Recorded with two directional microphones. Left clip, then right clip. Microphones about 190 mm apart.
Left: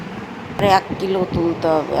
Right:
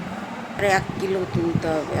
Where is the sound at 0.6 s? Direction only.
15° left (ahead or behind).